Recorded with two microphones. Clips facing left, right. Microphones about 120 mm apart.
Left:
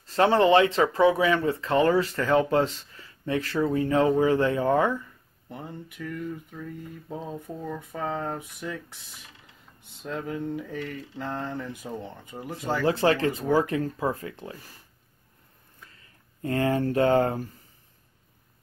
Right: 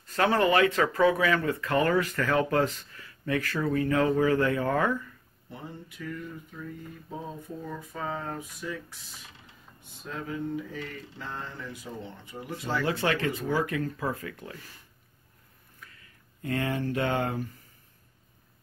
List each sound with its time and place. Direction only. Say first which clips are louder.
0.0 s speech: left 4 dB; 30° left (ahead or behind)
5.5 s speech: left 3 dB; 60° left (ahead or behind)
10.0 s speech: left 3 dB; 60° left (ahead or behind); by 12.9 s 45° left (ahead or behind)
12.9 s speech: left 5 dB; 30° left (ahead or behind)
15.8 s speech: right 1 dB; 30° left (ahead or behind)